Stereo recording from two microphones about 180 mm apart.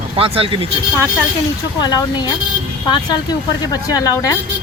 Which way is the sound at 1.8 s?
20° left (ahead or behind).